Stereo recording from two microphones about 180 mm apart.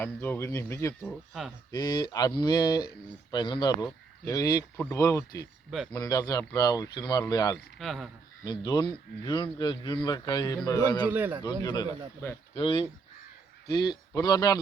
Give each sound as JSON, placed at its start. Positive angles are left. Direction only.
{"t": 0.0, "sound": "speech", "side_deg": 10}
{"t": 1.1, "sound": "speech", "side_deg": 0}
{"t": 1.7, "sound": "speech", "side_deg": 20}
{"t": 7.8, "sound": "speech", "side_deg": 0}
{"t": 8.4, "sound": "speech", "side_deg": 25}
{"t": 11.1, "sound": "a man's voice", "side_deg": -10}
{"t": 11.6, "sound": "speech", "side_deg": 25}